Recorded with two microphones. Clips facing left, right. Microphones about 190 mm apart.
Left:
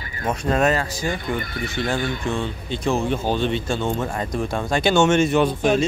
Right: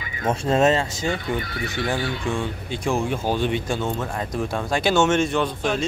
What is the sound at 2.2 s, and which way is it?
Speech, 10° right (ahead or behind).